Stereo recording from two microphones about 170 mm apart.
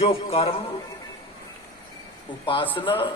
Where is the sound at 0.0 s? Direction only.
35° left (ahead or behind).